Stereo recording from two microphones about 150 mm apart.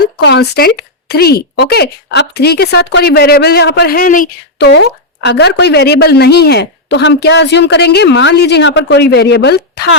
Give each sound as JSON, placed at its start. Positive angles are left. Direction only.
{"t": 0.3, "sound": "a woman's voice", "side_deg": 90}